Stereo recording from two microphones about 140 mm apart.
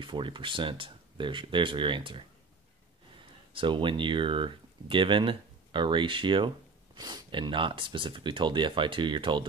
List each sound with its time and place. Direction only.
0.0 s speech: 35° right (ahead or behind)